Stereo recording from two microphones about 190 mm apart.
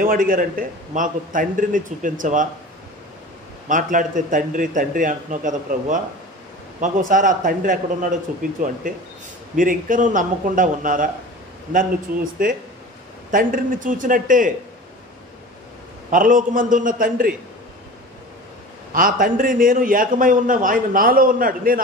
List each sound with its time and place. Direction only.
0.0 s a man's voice: 50° right (ahead or behind)
3.6 s a man's voice: 45° right (ahead or behind)
7.1 s a man's voice: 45° right (ahead or behind)
12.4 s a man's voice: 45° right (ahead or behind)
16.1 s a man's voice: 45° right (ahead or behind)
18.9 s a man's voice: 45° right (ahead or behind)